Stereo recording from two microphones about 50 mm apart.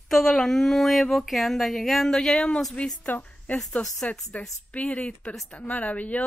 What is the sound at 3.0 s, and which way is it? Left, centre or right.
A woman's voice, left.